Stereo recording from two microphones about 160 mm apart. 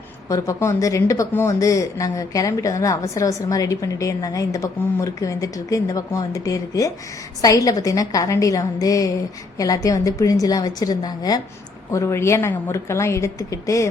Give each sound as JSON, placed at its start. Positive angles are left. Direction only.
{"t": 0.3, "sound": "a woman's voice", "side_deg": 20}